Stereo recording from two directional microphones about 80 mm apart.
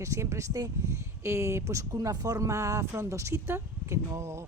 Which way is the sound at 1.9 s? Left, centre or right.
Right.